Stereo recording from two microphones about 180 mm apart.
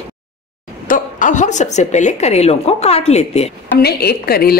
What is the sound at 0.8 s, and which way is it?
Speech, 45° left (ahead or behind).